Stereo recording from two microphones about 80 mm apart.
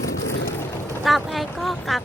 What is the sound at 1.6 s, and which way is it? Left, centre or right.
Speech, centre.